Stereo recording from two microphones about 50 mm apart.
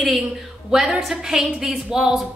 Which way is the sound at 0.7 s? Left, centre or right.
Centre.